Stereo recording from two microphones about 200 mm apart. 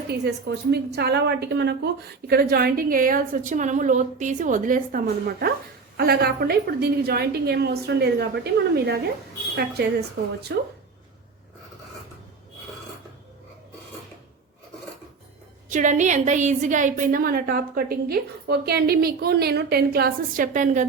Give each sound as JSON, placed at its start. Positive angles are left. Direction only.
{"t": 0.1, "sound": "a woman's voice", "side_deg": -55}
{"t": 10.5, "sound": "speech", "side_deg": -60}
{"t": 15.7, "sound": "a woman's voice", "side_deg": -40}